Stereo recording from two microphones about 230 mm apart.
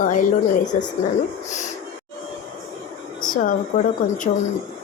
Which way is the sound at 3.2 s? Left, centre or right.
Left.